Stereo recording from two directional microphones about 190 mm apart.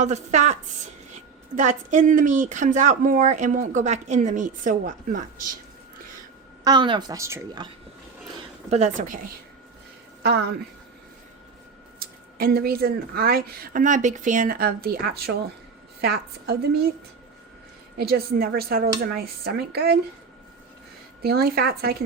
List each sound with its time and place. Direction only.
0.0 s a woman's voice: 35° right (ahead or behind)
6.7 s speech: 25° right (ahead or behind)
8.7 s speech: 40° right (ahead or behind)
11.9 s speech: 50° right (ahead or behind)
17.9 s speech: 55° right (ahead or behind)
21.2 s speech: 55° right (ahead or behind)